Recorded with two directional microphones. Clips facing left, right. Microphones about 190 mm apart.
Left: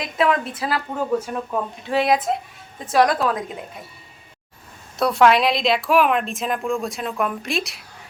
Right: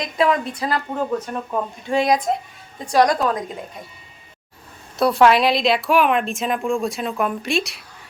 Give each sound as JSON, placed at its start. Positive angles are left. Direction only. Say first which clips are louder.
{"t": 0.0, "sound": "speech", "louder": "right 1 dB", "side_deg": 0}
{"t": 4.9, "sound": "speech", "louder": "right 1 dB", "side_deg": 0}